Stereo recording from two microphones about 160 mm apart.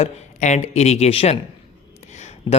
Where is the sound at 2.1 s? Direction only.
45° left (ahead or behind).